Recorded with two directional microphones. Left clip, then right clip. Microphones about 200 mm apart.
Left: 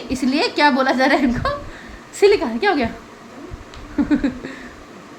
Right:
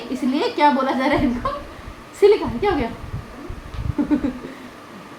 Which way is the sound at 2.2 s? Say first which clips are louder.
Left 1 dB; 45° left (ahead or behind).